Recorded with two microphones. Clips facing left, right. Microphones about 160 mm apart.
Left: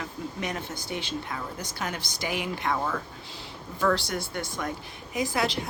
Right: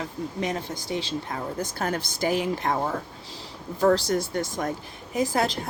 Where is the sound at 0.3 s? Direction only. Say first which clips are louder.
Right 5 dB; 35° right (ahead or behind).